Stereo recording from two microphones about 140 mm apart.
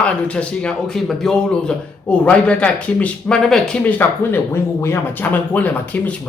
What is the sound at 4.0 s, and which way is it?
A man's voice, 15° left (ahead or behind).